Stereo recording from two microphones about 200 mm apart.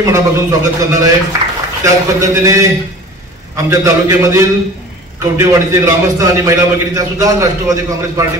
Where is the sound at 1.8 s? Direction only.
15° right (ahead or behind).